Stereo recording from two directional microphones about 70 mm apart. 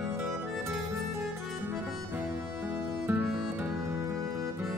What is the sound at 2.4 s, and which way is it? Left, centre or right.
Music, right.